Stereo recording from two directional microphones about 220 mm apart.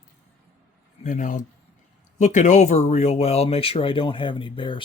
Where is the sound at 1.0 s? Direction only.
35° left (ahead or behind).